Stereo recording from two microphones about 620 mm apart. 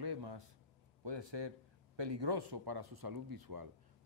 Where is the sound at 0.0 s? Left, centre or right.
Right.